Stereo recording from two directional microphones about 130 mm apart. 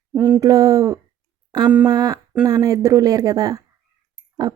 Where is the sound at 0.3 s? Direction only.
25° right (ahead or behind).